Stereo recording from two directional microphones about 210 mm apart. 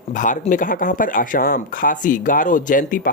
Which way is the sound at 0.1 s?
40° left (ahead or behind).